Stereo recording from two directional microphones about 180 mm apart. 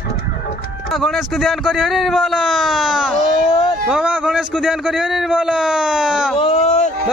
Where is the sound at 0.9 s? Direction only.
Centre (ahead or behind).